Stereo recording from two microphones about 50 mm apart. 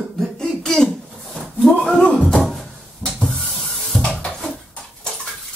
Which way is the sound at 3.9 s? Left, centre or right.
Centre.